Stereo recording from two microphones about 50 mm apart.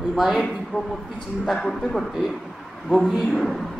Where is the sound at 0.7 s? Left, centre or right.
Right.